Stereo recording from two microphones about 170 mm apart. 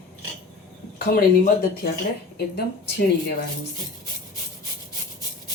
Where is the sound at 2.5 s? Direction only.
70° left (ahead or behind).